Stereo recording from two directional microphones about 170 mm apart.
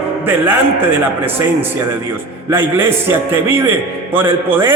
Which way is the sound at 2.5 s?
15° right (ahead or behind).